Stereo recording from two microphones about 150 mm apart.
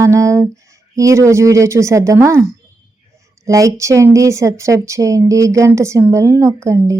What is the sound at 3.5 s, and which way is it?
A woman's voice, 20° right (ahead or behind).